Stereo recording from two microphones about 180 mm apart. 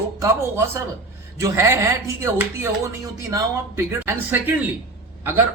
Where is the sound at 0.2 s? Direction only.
15° right (ahead or behind).